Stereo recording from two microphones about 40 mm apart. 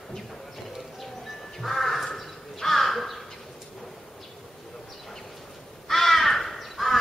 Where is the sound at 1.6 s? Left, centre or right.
Centre.